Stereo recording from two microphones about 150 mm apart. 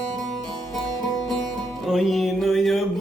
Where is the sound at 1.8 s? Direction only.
Centre (ahead or behind).